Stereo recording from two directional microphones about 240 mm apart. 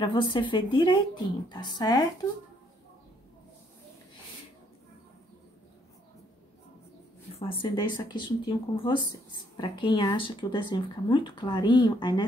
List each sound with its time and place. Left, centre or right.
0.0 s speech: centre
7.3 s speech: left